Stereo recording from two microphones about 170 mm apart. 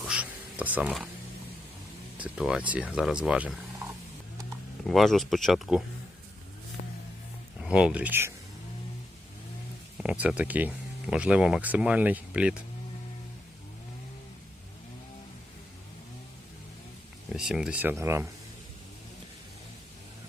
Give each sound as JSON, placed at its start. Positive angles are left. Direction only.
{"t": 0.0, "sound": "music", "side_deg": -5}
{"t": 2.1, "sound": "speech", "side_deg": -5}
{"t": 3.8, "sound": "mechanisms", "side_deg": -20}
{"t": 4.9, "sound": "speech", "side_deg": 0}
{"t": 7.6, "sound": "speech", "side_deg": -5}
{"t": 10.0, "sound": "speech", "side_deg": -5}
{"t": 17.3, "sound": "speech", "side_deg": -5}